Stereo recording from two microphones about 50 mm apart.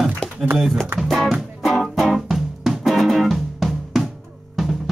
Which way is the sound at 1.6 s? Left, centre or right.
Centre.